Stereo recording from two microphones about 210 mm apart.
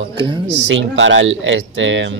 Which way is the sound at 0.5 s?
60° right (ahead or behind).